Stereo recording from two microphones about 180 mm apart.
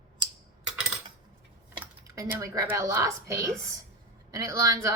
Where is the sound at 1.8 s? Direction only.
20° right (ahead or behind).